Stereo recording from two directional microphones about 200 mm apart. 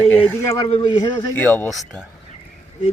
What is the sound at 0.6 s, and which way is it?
Speech, 25° left (ahead or behind).